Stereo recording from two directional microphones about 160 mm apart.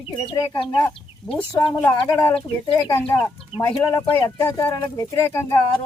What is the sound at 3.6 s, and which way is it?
Speech, 15° left (ahead or behind).